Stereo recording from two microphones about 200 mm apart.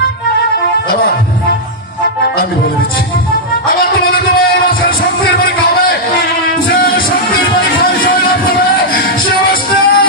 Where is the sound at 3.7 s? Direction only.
45° left (ahead or behind).